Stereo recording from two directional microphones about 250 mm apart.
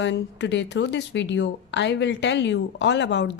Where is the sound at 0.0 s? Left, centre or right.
Left.